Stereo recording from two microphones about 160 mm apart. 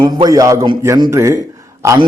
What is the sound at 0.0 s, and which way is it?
A man's voice, 25° right (ahead or behind).